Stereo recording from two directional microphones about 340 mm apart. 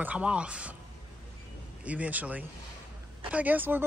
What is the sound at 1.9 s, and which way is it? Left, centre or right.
A woman's voice, centre.